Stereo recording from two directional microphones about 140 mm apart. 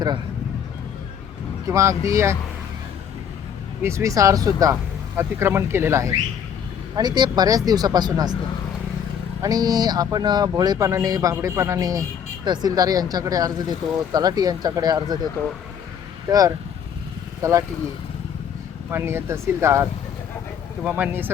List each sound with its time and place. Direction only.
1.6 s speech: 20° right (ahead or behind)
3.8 s speech: 20° right (ahead or behind)
6.9 s speech: 30° right (ahead or behind)
9.4 s speech: 25° right (ahead or behind)
17.4 s speech: 25° right (ahead or behind)
18.9 s speech: 15° right (ahead or behind)